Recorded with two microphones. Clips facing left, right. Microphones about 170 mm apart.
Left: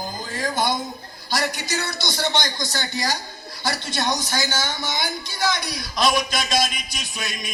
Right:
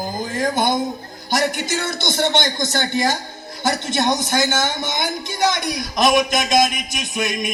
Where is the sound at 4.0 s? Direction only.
20° right (ahead or behind).